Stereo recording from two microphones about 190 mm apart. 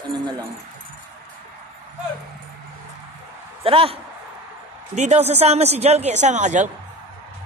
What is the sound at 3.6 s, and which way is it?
Speech, 30° right (ahead or behind).